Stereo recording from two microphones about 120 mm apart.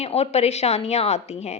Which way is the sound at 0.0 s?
60° left (ahead or behind).